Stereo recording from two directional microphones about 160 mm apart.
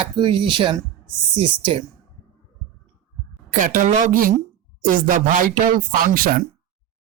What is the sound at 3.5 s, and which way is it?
A woman's voice, 55° right (ahead or behind).